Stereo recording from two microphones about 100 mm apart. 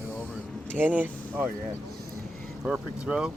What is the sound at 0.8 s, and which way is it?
Speech, 15° right (ahead or behind).